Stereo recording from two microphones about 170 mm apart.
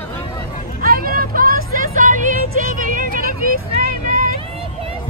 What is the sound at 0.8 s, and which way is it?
Vehicle, 55° right (ahead or behind).